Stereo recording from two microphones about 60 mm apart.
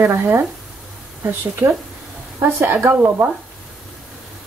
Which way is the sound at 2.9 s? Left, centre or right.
Right.